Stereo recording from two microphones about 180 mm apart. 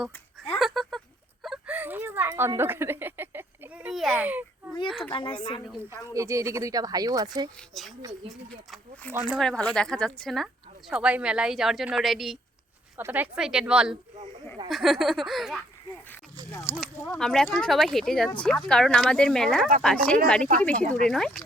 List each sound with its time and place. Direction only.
0.6 s a sound: centre (ahead or behind)
4.1 s a child's voice: 10° right (ahead or behind)
4.9 s a woman's voice: centre (ahead or behind)
5.1 s speech: 25° left (ahead or behind)
6.1 s speech: 15° right (ahead or behind)
7.7 s a woman's voice: centre (ahead or behind)
16.5 s a sound: 10° left (ahead or behind)
17.2 s a woman's voice: 5° left (ahead or behind)